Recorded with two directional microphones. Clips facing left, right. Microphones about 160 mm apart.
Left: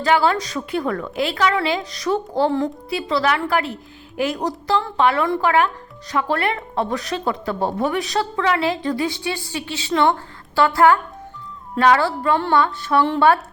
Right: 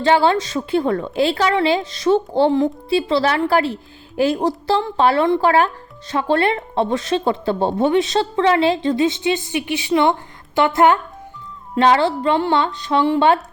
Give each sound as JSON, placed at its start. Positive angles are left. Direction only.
{"t": 0.0, "sound": "a woman's voice", "side_deg": -25}